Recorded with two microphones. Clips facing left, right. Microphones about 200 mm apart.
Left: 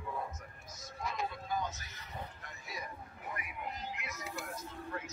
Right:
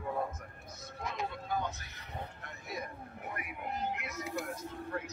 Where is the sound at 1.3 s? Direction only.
60° right (ahead or behind).